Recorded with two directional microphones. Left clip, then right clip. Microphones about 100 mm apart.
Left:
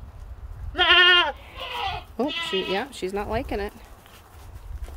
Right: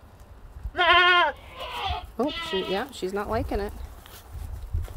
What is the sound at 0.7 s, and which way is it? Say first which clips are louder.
Bleat: left 2 dB; 10° right (ahead or behind).